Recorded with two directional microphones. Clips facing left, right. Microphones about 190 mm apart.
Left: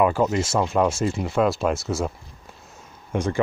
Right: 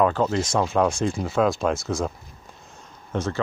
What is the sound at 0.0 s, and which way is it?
Speech, 10° left (ahead or behind).